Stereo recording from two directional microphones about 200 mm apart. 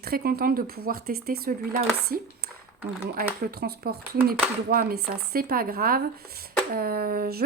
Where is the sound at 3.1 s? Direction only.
50° right (ahead or behind).